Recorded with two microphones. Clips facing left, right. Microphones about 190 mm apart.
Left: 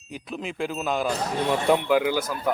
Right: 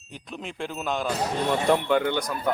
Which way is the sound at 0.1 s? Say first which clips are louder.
Left 4 dB; 5° left (ahead or behind).